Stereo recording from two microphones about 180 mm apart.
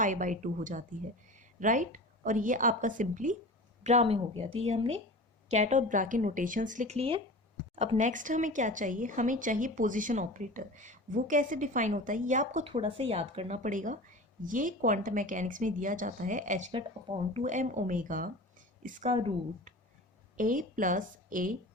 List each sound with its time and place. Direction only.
0.0 s speech: 45° right (ahead or behind)
12.6 s speech: 30° right (ahead or behind)
16.7 s speech: 30° right (ahead or behind)
17.4 s a woman's voice: 45° right (ahead or behind)
20.3 s speech: 50° right (ahead or behind)